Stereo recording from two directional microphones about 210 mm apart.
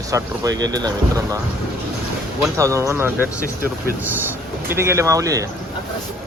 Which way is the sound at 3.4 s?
40° right (ahead or behind).